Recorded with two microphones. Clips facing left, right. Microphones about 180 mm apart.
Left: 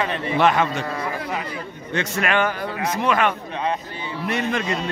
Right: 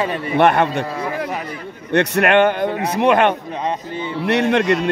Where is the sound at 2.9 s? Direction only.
60° right (ahead or behind).